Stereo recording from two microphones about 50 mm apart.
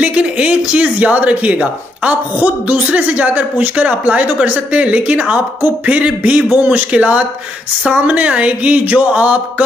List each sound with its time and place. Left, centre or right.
0.0 s speech: right